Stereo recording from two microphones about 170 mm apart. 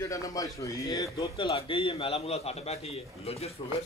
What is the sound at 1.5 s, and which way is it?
A man's voice, 30° left (ahead or behind).